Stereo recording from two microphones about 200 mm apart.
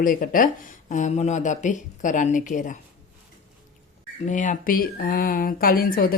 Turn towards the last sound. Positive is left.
turn(degrees=45)  # may be behind; listen again after turning